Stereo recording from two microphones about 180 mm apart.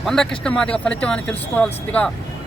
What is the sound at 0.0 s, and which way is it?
Speech, 5° left (ahead or behind).